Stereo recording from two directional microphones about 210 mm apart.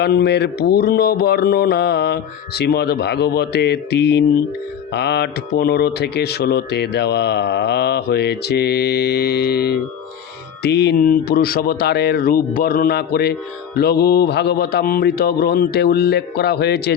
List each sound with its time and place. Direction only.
0.0 s speech: 50° left (ahead or behind)